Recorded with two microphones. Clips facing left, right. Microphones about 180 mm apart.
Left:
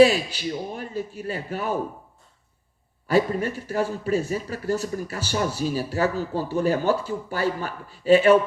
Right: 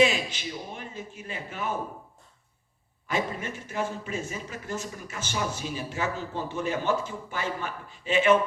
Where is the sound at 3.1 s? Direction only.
35° left (ahead or behind).